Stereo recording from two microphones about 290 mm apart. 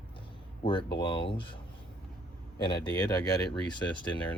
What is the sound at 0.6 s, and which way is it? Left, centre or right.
Speech, centre.